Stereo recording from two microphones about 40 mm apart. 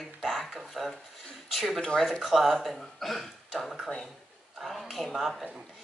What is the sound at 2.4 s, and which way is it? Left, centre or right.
Speech, centre.